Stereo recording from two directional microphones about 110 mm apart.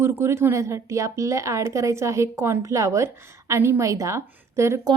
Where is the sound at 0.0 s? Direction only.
25° right (ahead or behind).